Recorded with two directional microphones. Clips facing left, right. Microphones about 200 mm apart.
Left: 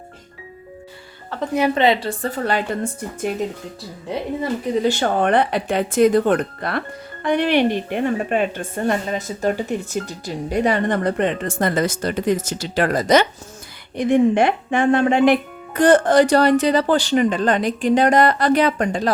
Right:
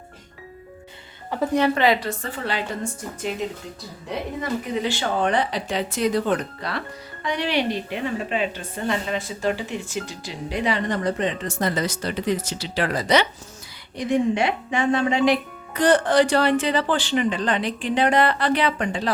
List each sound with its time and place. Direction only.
1.3 s speech: 15° right (ahead or behind)
1.7 s a woman's voice: 25° left (ahead or behind); by 3.3 s 50° left (ahead or behind)
4.4 s speech: 35° left (ahead or behind)